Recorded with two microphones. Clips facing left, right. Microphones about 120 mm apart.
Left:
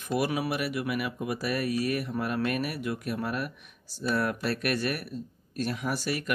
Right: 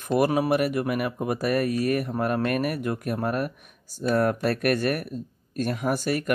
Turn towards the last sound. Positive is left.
turn(degrees=-50)  # may be behind; listen again after turning